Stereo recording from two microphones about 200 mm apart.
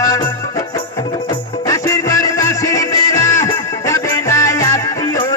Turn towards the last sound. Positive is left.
turn(degrees=20)  # may be behind; listen again after turning